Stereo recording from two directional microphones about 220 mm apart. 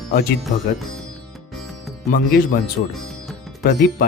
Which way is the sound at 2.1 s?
40° left (ahead or behind).